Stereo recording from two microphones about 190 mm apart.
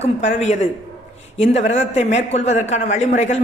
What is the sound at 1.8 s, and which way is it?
A woman's voice, 35° left (ahead or behind).